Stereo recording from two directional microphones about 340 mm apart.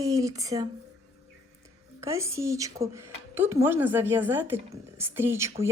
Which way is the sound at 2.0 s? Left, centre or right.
Centre.